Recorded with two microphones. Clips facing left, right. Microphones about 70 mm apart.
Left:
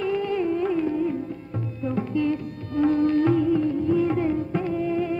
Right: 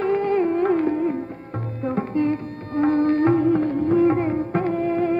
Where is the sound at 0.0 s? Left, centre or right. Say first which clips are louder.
Right 4 dB; right.